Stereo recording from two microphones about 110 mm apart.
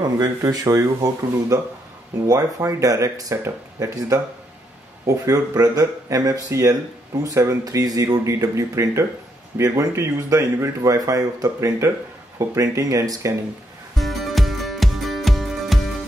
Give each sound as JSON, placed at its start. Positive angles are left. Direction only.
{"t": 0.0, "sound": "speech", "side_deg": -35}
{"t": 13.9, "sound": "music", "side_deg": 0}